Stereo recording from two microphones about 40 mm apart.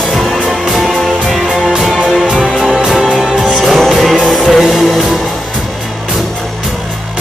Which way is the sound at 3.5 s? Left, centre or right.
Centre.